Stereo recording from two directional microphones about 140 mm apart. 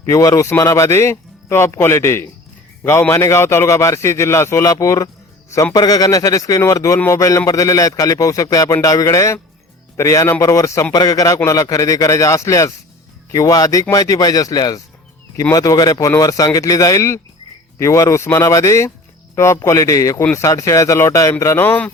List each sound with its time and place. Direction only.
0.0 s speech: 25° left (ahead or behind)